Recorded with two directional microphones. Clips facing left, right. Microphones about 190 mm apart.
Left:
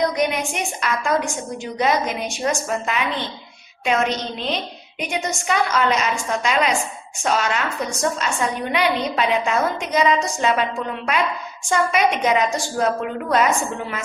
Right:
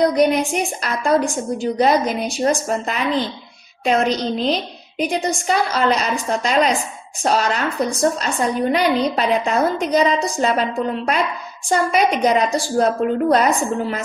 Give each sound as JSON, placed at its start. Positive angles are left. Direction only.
{"t": 0.0, "sound": "a woman's voice", "side_deg": -35}